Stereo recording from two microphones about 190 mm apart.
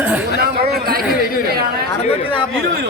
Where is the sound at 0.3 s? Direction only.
55° right (ahead or behind).